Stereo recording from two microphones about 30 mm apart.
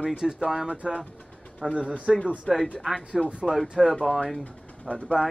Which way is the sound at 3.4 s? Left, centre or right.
Centre.